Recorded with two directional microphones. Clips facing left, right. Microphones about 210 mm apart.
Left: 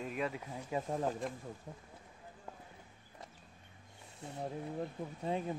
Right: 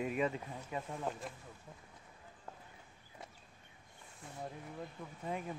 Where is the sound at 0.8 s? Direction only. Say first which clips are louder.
Left 5 dB; 40° left (ahead or behind).